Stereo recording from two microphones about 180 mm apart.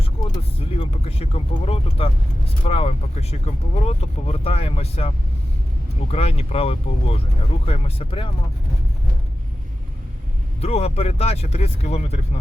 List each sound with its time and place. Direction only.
0.0 s vehicle: 30° left (ahead or behind)
2.6 s speech: 35° left (ahead or behind)
10.6 s speech: 35° left (ahead or behind)